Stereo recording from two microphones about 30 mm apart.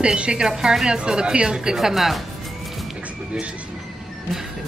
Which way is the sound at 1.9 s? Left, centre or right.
Centre.